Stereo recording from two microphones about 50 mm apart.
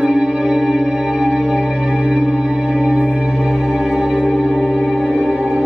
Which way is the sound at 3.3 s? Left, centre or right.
Centre.